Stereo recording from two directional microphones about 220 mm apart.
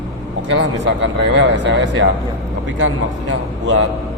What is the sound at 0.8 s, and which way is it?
Speech, 55° right (ahead or behind).